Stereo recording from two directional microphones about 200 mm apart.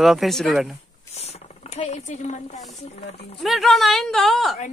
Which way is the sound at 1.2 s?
30° left (ahead or behind).